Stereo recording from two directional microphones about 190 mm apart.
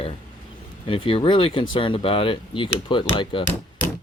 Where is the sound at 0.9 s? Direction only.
30° left (ahead or behind).